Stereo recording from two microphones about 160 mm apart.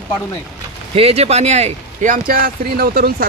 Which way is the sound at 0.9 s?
40° right (ahead or behind).